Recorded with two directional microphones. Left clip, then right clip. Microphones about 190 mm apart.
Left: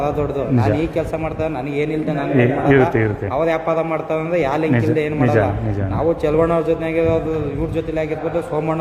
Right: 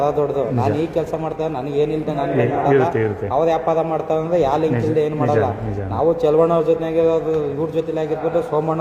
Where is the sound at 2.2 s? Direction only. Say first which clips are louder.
Left 1 dB; 40° left (ahead or behind).